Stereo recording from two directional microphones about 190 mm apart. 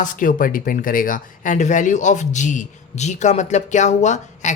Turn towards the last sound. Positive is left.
turn(degrees=40)  # may be behind; listen again after turning